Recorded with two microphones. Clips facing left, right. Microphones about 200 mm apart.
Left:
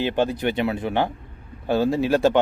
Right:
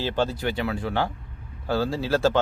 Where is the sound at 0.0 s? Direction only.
15° left (ahead or behind).